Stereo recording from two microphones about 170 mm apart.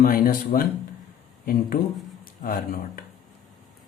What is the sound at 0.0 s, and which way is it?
Speech, 55° left (ahead or behind).